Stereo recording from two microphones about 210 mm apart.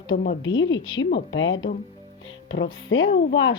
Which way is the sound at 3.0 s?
30° left (ahead or behind).